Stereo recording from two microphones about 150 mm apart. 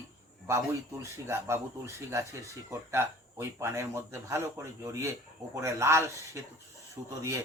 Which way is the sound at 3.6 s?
20° right (ahead or behind).